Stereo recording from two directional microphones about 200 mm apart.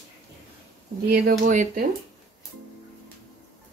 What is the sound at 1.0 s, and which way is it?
Speech, 45° right (ahead or behind).